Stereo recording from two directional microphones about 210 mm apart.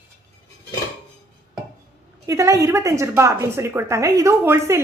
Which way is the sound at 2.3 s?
15° right (ahead or behind).